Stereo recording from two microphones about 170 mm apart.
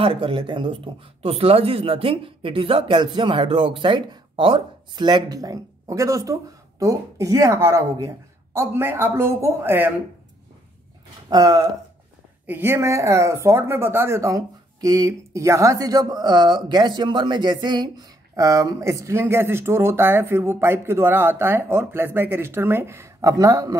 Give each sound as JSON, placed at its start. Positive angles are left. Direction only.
{"t": 0.0, "sound": "speech", "side_deg": -30}
{"t": 11.2, "sound": "speech", "side_deg": -25}
{"t": 12.4, "sound": "speech", "side_deg": -15}